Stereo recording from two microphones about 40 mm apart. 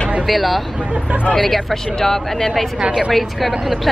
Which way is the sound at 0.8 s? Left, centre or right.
Right.